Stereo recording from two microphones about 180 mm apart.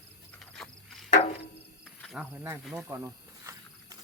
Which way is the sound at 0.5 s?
Centre (ahead or behind).